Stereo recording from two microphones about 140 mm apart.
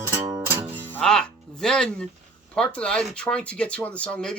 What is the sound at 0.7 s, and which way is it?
Music, 10° left (ahead or behind).